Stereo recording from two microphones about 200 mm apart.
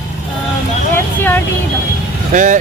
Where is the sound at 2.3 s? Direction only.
40° right (ahead or behind).